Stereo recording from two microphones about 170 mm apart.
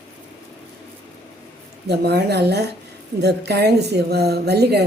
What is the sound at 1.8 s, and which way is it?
A woman's voice, 75° right (ahead or behind).